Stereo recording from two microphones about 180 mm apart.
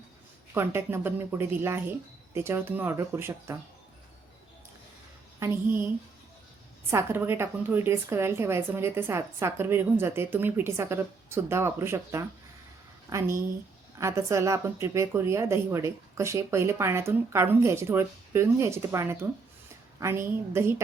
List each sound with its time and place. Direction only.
0.5 s a woman's voice: 15° right (ahead or behind)
5.4 s a woman's voice: 10° right (ahead or behind)
6.9 s a woman's voice: 15° right (ahead or behind)